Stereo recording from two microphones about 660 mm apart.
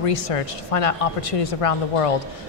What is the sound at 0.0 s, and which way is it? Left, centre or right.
A woman's voice, left.